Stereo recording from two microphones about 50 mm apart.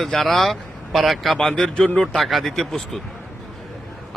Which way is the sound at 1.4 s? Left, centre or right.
Centre.